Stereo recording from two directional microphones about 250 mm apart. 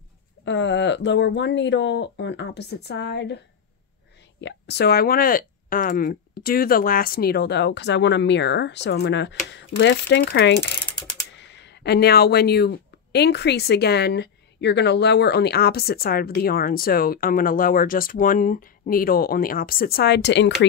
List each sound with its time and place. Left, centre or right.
0.5 s speech: left
4.4 s speech: left